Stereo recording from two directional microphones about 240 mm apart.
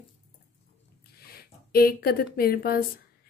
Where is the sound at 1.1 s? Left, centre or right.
Left.